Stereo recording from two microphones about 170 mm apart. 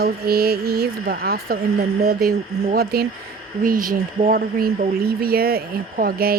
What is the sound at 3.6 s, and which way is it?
Speech, 55° right (ahead or behind).